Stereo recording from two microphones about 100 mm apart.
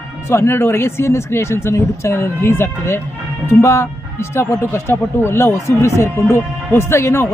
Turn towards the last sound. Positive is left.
turn(degrees=25)  # may be behind; listen again after turning